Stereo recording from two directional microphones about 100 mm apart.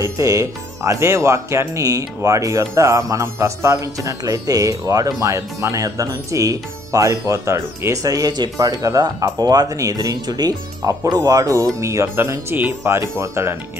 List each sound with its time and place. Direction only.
0.0 s speech: 35° right (ahead or behind)